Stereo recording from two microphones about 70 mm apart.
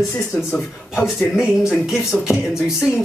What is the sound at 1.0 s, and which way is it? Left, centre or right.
Speech, centre.